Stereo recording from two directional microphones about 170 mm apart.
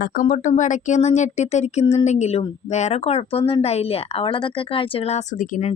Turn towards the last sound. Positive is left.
turn(degrees=45)  # may be behind; listen again after turning